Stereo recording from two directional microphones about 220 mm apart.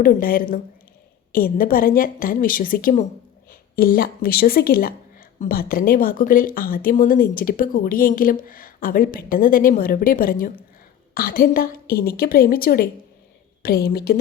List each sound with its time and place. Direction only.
0.0 s a woman's voice: 40° left (ahead or behind)